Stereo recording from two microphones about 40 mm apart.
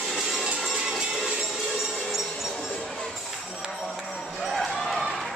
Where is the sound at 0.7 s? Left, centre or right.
Right.